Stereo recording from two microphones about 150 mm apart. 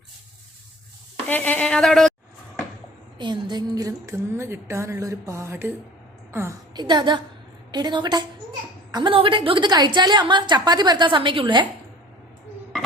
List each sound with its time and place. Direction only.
1.3 s a woman's voice: 10° left (ahead or behind)
3.2 s a woman's voice: 30° right (ahead or behind)